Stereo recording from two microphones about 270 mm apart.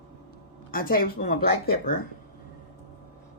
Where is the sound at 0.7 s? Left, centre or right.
Left.